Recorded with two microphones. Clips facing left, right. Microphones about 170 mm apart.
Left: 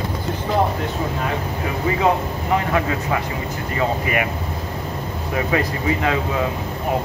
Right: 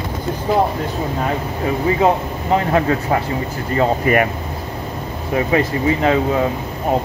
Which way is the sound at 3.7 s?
45° right (ahead or behind).